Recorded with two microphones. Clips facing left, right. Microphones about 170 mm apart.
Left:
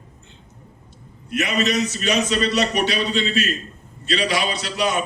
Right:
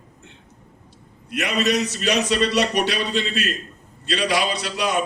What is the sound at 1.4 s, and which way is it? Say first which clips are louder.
A man's voice: right 1 dB; 65° right (ahead or behind).